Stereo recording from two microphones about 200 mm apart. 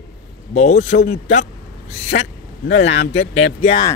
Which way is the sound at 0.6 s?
35° left (ahead or behind).